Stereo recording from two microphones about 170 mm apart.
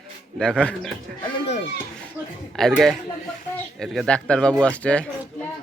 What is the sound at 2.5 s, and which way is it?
Speech, centre (ahead or behind).